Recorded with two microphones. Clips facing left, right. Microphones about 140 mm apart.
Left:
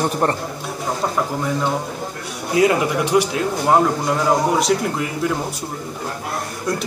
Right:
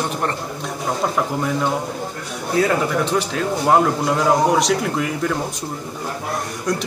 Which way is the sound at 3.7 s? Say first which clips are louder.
Even; centre (ahead or behind).